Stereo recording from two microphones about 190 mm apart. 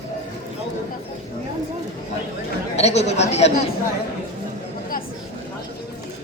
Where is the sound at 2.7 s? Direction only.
35° left (ahead or behind).